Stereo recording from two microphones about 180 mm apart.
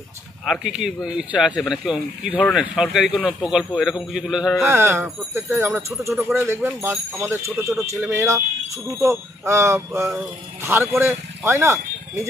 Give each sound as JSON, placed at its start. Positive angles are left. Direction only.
{"t": 0.5, "sound": "speech", "side_deg": -5}
{"t": 4.6, "sound": "speech", "side_deg": -15}